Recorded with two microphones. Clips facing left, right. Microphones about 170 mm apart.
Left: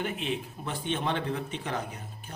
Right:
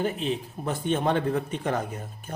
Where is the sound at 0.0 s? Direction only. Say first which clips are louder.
Right 5 dB; 35° right (ahead or behind).